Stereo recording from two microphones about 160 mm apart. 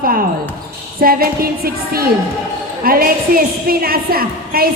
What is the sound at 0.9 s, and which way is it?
A woman's voice, 65° right (ahead or behind).